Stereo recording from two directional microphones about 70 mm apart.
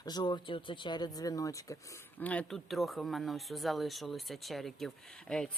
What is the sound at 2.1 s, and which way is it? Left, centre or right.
Speech, left.